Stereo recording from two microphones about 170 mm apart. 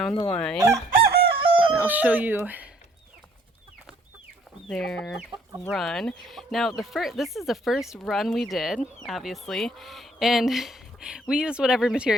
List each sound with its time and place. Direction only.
0.3 s speech: 5° left (ahead or behind)
0.9 s chicken: 65° right (ahead or behind)
1.4 s a sound: 30° right (ahead or behind)
1.8 s speech: 10° right (ahead or behind)
4.7 s speech: 5° left (ahead or behind)